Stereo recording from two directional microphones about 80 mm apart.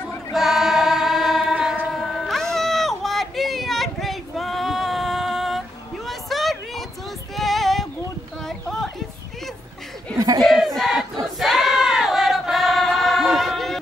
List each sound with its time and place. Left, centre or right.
0.3 s choir: centre
1.5 s train: centre
1.9 s a sound: centre
10.1 s a sound: right
10.4 s battle cry: centre
11.3 s choir: centre